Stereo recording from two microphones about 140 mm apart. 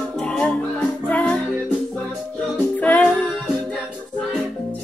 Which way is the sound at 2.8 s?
10° left (ahead or behind).